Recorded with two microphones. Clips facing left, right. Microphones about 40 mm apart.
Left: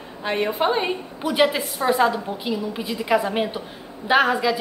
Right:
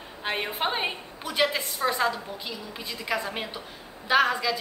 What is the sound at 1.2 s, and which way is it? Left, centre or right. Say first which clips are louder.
A woman's voice: left 6 dB; centre.